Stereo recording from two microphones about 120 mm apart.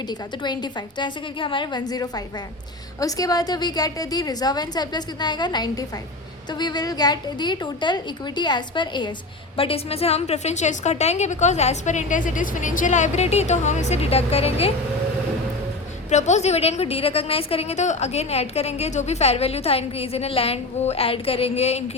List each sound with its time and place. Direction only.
0.1 s a woman's voice: 35° left (ahead or behind)
9.6 s a woman's voice: 55° left (ahead or behind)
16.0 s a woman's voice: 75° left (ahead or behind)